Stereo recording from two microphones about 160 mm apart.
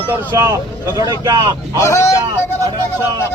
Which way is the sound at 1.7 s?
20° left (ahead or behind).